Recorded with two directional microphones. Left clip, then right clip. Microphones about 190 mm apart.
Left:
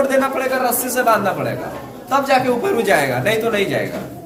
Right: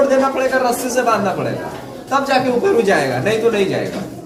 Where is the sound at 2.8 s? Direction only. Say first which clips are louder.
Even; 15° left (ahead or behind).